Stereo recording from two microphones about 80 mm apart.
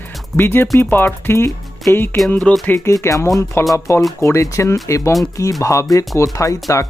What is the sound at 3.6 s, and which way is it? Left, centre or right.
Speech, left.